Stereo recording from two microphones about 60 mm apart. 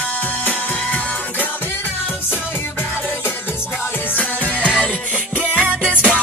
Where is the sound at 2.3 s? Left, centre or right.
Left.